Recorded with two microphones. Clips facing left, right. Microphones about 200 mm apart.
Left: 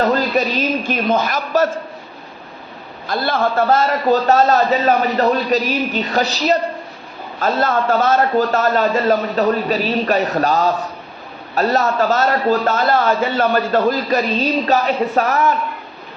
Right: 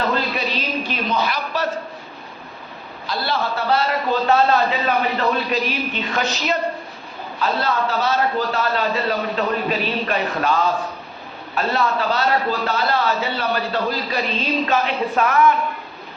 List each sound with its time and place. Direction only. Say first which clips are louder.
0.1 s a sound: left 6 dB; 40° left (ahead or behind)
0.9 s a man's voice: left 5 dB; 45° left (ahead or behind)
3.1 s a man's voice: left 5 dB; 50° left (ahead or behind)
7.3 s a man's voice: left 4 dB; 50° left (ahead or behind)